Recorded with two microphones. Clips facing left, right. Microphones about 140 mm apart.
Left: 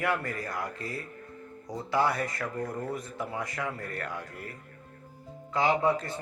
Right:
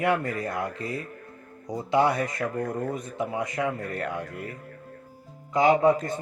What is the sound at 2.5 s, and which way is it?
Speech, 55° right (ahead or behind).